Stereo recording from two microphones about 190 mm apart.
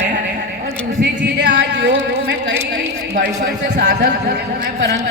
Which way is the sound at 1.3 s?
65° right (ahead or behind).